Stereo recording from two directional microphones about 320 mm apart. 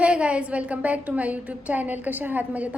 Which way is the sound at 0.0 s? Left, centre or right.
Centre.